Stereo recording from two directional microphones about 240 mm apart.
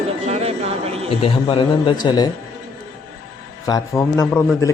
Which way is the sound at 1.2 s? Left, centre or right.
Left.